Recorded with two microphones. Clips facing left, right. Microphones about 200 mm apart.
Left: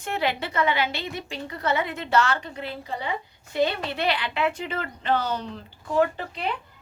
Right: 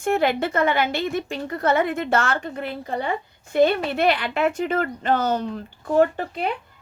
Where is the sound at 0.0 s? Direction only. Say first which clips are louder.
Right 7 dB; 50° right (ahead or behind).